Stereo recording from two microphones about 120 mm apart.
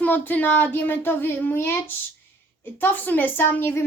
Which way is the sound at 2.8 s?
15° left (ahead or behind).